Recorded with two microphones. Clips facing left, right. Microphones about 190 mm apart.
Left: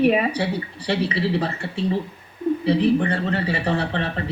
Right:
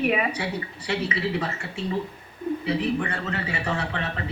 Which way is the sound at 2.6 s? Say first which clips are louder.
Left 8 dB; 30° left (ahead or behind).